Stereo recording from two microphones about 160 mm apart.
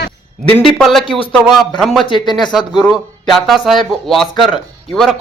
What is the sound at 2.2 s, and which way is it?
Speech, 25° left (ahead or behind).